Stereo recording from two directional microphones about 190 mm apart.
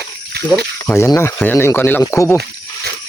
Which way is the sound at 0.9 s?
15° left (ahead or behind).